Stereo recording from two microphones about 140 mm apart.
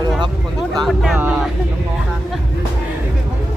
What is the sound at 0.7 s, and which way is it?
Speech, centre (ahead or behind).